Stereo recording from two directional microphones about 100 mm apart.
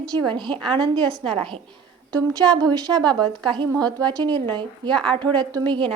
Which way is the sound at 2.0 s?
45° right (ahead or behind).